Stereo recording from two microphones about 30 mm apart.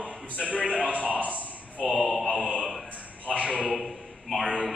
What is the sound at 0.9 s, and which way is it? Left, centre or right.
Speech, left.